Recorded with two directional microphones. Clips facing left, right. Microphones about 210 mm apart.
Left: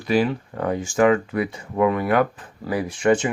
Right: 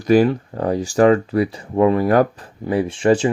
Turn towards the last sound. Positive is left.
turn(degrees=-30)  # may be behind; listen again after turning